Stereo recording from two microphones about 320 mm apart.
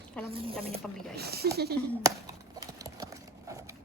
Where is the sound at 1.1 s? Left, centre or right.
Right.